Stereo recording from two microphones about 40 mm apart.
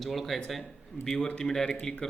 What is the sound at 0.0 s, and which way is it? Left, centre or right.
Speech, centre.